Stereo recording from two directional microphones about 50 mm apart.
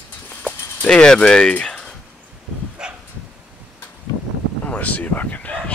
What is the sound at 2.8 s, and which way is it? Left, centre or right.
Dog, centre.